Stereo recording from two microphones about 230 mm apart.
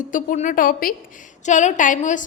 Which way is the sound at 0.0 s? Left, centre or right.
Left.